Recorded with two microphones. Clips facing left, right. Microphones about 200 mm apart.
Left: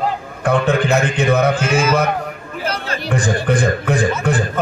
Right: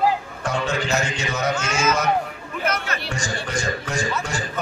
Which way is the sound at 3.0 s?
55° left (ahead or behind).